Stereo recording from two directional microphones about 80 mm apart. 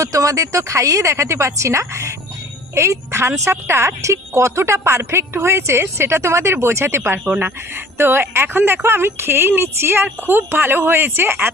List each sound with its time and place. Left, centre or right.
0.0 s a woman's voice: right